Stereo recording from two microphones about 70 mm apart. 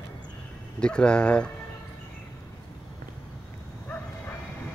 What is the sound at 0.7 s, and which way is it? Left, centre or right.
Speech, centre.